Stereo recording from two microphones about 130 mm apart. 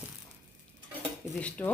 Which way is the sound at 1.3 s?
10° left (ahead or behind).